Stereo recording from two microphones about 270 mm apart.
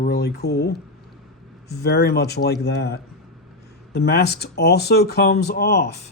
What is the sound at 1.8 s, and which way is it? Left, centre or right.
Speech, left.